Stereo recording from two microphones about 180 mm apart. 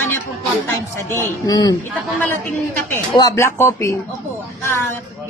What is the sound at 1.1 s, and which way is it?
Speech, 20° left (ahead or behind).